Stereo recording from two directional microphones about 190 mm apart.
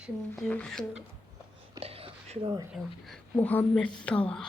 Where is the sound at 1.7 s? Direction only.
30° right (ahead or behind).